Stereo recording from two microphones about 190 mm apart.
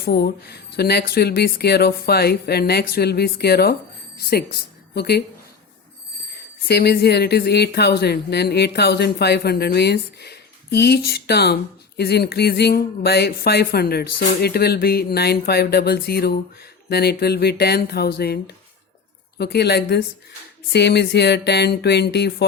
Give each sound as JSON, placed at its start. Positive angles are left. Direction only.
{"t": 0.0, "sound": "speech", "side_deg": 60}
{"t": 6.7, "sound": "speech", "side_deg": 60}